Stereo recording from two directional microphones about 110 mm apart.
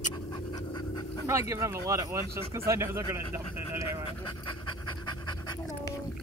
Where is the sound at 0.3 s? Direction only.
40° left (ahead or behind).